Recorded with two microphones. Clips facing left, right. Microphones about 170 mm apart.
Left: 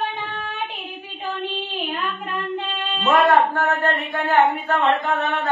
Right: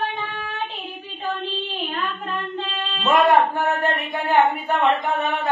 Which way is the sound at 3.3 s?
15° right (ahead or behind).